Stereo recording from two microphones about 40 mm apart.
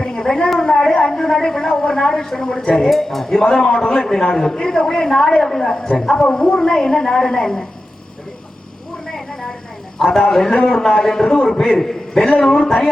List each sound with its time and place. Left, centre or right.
0.0 s a man's voice: centre
9.0 s vehicle: centre
10.0 s a man's voice: centre